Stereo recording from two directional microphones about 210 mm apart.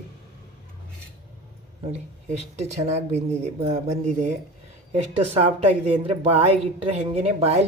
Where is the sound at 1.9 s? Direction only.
30° right (ahead or behind).